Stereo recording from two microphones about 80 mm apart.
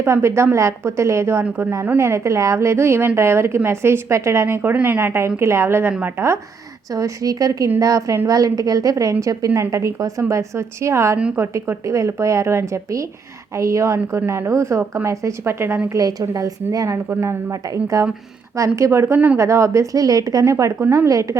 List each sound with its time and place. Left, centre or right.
0.0 s a woman's voice: right
1.5 s speech: centre
2.0 s a woman's voice: right
6.9 s a woman's voice: right
15.9 s a woman's voice: right
17.1 s a woman's voice: right
17.9 s a woman's voice: right
20.7 s speech: right